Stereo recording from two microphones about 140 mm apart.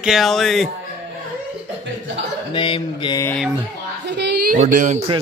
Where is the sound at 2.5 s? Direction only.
35° left (ahead or behind).